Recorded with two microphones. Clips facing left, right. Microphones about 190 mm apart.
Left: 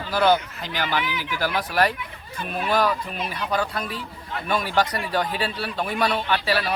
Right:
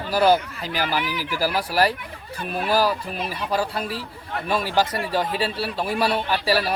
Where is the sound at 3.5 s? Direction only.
30° right (ahead or behind).